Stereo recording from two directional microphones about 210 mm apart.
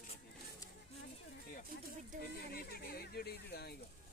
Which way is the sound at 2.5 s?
45° left (ahead or behind).